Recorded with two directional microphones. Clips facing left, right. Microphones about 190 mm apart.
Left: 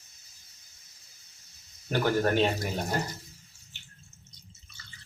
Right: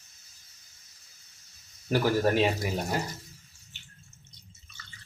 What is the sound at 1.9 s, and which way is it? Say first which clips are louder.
Speech: right 1 dB; 5° right (ahead or behind).